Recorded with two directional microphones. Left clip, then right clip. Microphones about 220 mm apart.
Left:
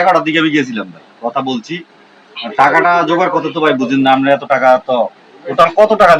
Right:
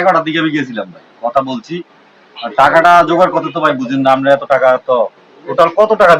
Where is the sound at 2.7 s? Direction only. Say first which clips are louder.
Right 3 dB; centre (ahead or behind).